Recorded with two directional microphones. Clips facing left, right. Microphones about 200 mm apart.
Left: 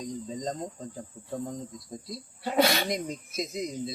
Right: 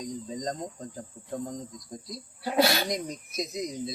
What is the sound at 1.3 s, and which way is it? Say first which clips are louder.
Speech: even; 5° left (ahead or behind).